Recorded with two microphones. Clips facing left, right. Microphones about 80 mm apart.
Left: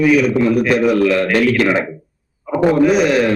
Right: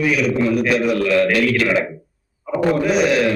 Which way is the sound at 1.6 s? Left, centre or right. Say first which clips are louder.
Left 3 dB; left.